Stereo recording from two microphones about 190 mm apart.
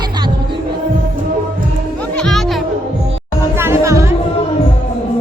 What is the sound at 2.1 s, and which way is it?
Music, 5° left (ahead or behind).